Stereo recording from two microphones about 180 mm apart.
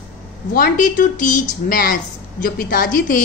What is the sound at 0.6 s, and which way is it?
A woman's voice, 50° left (ahead or behind).